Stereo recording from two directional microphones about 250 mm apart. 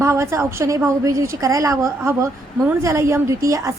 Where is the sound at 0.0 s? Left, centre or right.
Centre.